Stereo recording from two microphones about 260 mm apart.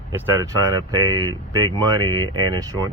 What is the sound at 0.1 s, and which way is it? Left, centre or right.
Speech, centre.